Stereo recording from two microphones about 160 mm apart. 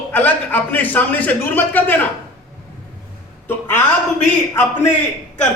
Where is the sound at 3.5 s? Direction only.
15° left (ahead or behind).